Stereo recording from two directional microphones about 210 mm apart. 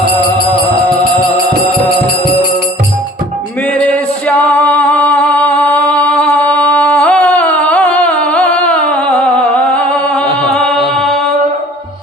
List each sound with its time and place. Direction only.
3.8 s music: 5° left (ahead or behind)